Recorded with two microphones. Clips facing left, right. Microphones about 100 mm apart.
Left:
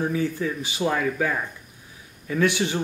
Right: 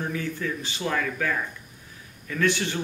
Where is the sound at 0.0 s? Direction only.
15° left (ahead or behind).